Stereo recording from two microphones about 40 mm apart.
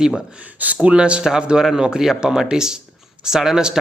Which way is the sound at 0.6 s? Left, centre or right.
Right.